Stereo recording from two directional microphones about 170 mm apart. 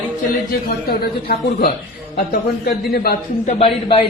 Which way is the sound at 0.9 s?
65° left (ahead or behind).